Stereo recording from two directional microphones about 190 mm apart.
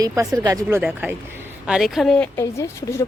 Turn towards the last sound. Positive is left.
turn(degrees=15)  # may be behind; listen again after turning